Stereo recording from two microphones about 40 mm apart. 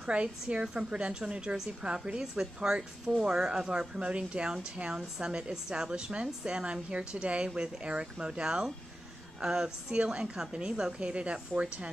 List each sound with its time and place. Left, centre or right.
0.0 s a woman's voice: right